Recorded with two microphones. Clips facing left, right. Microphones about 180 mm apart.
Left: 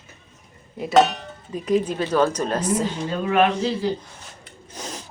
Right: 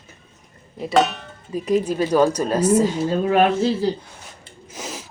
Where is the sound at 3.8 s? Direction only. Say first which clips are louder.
Right 2 dB; 35° right (ahead or behind).